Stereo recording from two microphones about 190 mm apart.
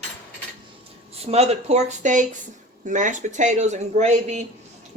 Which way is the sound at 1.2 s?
35° right (ahead or behind).